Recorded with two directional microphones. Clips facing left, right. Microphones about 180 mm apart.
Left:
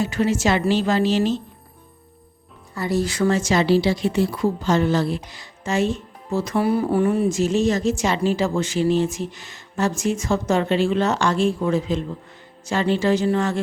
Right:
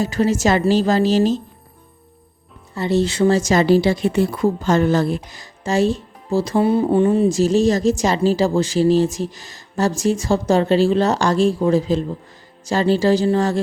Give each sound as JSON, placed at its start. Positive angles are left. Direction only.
{"t": 0.0, "sound": "speech", "side_deg": -40}
{"t": 2.7, "sound": "speech", "side_deg": -25}